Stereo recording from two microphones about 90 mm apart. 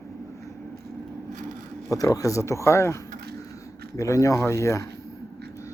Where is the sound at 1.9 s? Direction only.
40° left (ahead or behind).